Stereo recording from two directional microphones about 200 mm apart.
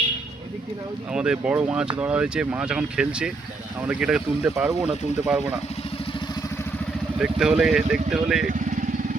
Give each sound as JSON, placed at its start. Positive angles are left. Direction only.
{"t": 1.1, "sound": "speech", "side_deg": -5}
{"t": 7.2, "sound": "speech", "side_deg": -5}